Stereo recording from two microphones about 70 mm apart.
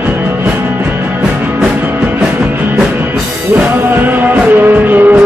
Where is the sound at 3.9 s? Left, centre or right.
Right.